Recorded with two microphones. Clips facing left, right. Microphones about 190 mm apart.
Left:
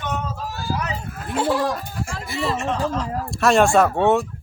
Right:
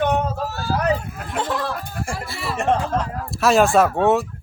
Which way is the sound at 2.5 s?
55° right (ahead or behind).